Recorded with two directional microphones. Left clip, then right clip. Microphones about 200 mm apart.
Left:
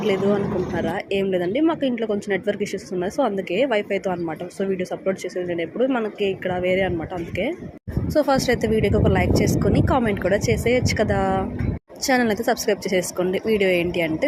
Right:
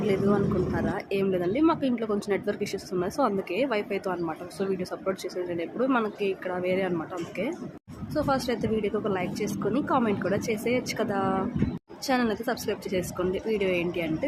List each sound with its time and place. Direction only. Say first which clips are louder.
0.8 s speech: left 5 dB; 15° left (ahead or behind)
8.1 s speech: left 8 dB; 15° left (ahead or behind)